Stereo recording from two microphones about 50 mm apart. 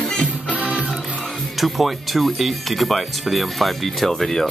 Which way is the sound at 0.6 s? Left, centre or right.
Right.